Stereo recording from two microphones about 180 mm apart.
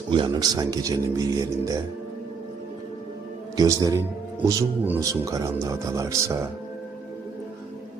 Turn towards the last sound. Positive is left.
turn(degrees=-15)  # may be behind; listen again after turning